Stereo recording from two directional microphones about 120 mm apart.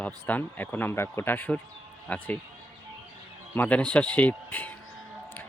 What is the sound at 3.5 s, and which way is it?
Speech, 10° left (ahead or behind).